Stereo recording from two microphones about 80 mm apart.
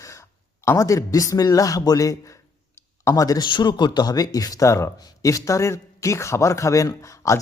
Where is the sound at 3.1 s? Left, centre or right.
Left.